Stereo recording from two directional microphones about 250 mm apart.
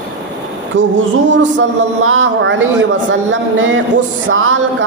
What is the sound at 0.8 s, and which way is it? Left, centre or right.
Speech, right.